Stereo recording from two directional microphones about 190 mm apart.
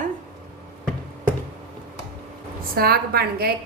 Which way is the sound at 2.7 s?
55° right (ahead or behind).